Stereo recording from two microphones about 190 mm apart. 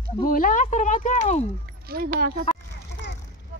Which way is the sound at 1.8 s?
55° right (ahead or behind).